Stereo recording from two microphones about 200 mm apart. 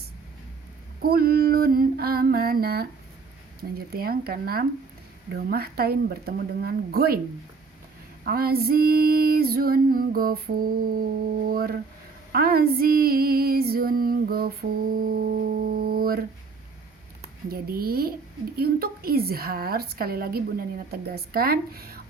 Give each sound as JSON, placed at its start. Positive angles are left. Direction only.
{"t": 1.0, "sound": "a woman's voice", "side_deg": -50}
{"t": 8.2, "sound": "a woman's voice", "side_deg": -50}
{"t": 17.5, "sound": "a woman's voice", "side_deg": -50}